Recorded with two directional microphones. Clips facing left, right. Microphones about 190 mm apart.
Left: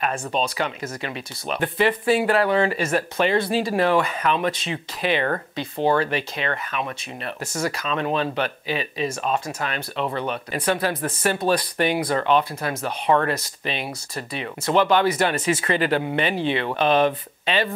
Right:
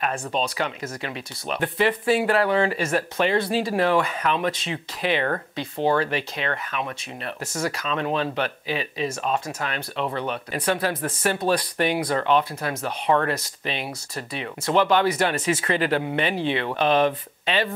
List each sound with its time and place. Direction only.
0.4 s speech: 15° left (ahead or behind)